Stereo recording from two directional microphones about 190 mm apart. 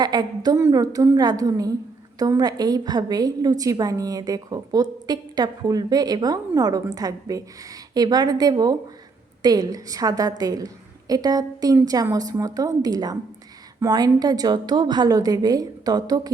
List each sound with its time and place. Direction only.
0.0 s a woman's voice: 20° right (ahead or behind)